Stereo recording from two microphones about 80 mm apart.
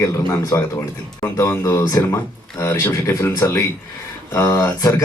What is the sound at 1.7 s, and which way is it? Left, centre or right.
A man's voice, left.